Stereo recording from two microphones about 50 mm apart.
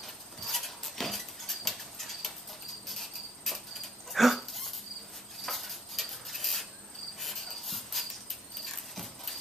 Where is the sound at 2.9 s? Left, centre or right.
Centre.